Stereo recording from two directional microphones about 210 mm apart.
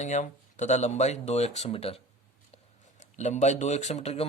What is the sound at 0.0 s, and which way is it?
Speech, 35° left (ahead or behind).